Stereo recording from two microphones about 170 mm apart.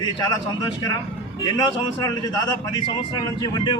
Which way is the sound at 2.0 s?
25° left (ahead or behind).